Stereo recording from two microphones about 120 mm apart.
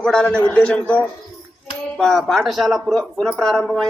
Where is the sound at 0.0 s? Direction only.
5° left (ahead or behind).